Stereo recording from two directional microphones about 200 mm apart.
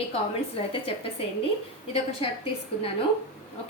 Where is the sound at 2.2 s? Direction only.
30° left (ahead or behind).